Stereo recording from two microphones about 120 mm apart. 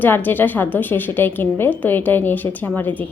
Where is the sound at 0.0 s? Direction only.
15° left (ahead or behind).